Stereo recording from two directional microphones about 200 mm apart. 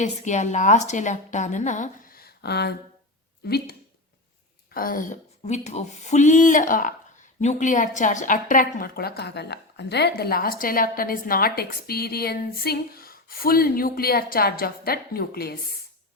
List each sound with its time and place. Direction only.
0.0 s a woman's voice: 35° left (ahead or behind)